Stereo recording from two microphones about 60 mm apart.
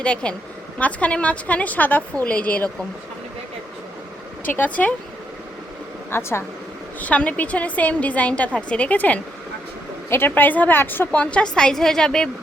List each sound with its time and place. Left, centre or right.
0.0 s a woman's voice: centre
4.5 s a woman's voice: left
6.1 s speech: left
7.0 s a woman's voice: left
10.1 s a woman's voice: left; by 12.3 s centre